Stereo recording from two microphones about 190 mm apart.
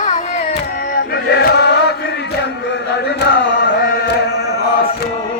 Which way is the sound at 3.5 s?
55° left (ahead or behind).